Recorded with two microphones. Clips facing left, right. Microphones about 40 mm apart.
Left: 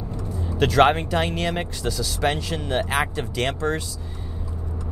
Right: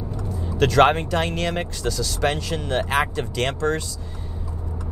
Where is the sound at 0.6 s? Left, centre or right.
Centre.